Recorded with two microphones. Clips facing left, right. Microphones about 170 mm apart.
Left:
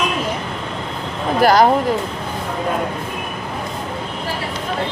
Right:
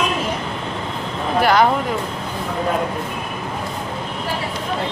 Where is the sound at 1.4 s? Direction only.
40° left (ahead or behind).